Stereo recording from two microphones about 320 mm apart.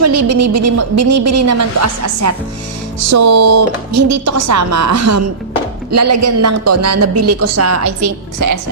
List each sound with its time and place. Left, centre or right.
0.0 s a woman's voice: right
8.4 s a woman's voice: right